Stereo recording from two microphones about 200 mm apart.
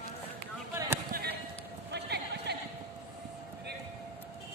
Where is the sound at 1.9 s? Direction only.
55° right (ahead or behind).